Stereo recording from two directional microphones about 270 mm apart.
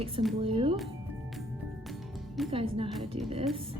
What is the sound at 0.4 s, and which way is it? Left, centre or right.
Speech, centre.